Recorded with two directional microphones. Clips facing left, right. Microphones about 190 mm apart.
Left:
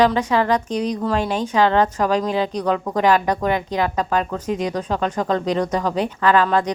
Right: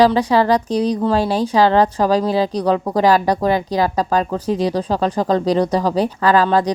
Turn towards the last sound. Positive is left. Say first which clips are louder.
# right 3 dB
turn(degrees=-35)  # may be behind; listen again after turning